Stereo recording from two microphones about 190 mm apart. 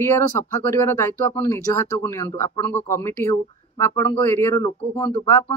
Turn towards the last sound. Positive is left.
turn(degrees=20)  # may be behind; listen again after turning